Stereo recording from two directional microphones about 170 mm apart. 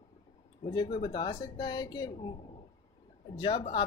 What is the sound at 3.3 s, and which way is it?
Speech, 25° left (ahead or behind).